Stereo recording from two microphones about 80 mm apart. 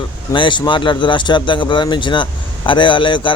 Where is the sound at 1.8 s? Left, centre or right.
Left.